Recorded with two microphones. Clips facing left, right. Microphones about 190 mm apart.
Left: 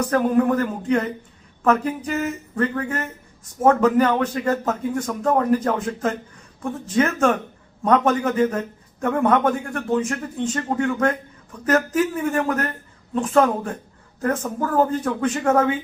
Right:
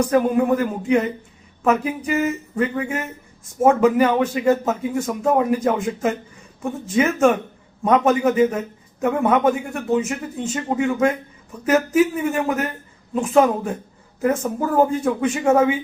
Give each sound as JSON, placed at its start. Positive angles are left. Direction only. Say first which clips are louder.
{"t": 0.0, "sound": "speech", "louder": "right 1 dB", "side_deg": -10}